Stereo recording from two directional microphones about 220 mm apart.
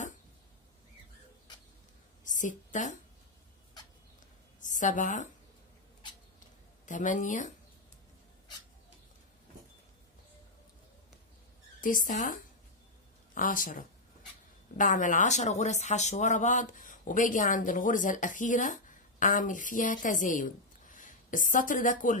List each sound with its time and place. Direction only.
2.2 s a sound: 35° left (ahead or behind)
4.6 s a woman's voice: 35° left (ahead or behind)
6.9 s a woman's voice: 35° left (ahead or behind)
11.8 s a woman's voice: 40° left (ahead or behind)